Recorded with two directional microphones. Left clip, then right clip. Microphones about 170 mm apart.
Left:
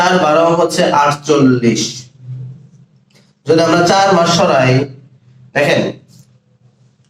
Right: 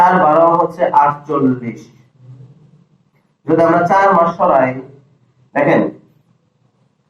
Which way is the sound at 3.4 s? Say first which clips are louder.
Left 1 dB; 35° left (ahead or behind).